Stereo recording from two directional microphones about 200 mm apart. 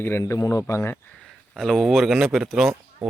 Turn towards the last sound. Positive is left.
turn(degrees=0)  # may be behind; listen again after turning